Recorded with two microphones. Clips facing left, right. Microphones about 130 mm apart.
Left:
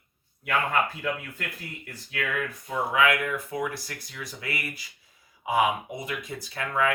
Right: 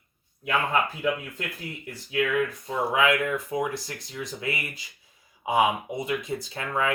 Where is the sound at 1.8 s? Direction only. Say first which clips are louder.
Right 7 dB; 20° right (ahead or behind).